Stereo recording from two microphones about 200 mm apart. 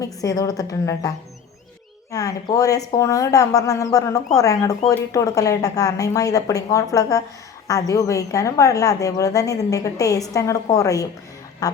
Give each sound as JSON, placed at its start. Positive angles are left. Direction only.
{"t": 0.0, "sound": "a woman's voice", "side_deg": 15}
{"t": 11.6, "sound": "music", "side_deg": 20}